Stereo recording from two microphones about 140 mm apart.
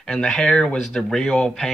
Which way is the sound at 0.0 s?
5° left (ahead or behind).